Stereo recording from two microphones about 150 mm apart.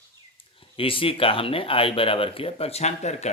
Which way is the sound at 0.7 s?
35° left (ahead or behind).